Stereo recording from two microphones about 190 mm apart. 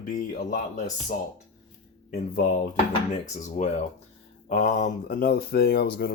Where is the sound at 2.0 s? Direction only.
45° left (ahead or behind).